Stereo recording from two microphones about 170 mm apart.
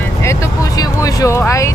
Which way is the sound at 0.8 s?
20° left (ahead or behind).